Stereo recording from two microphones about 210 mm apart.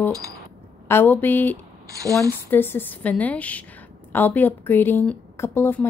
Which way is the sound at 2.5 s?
10° left (ahead or behind).